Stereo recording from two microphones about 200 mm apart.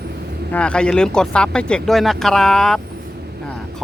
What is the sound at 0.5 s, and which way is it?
Speech, 5° left (ahead or behind).